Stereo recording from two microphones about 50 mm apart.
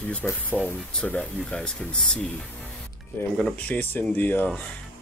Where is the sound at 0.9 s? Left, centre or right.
Left.